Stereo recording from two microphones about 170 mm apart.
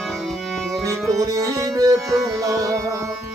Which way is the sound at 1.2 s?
20° right (ahead or behind).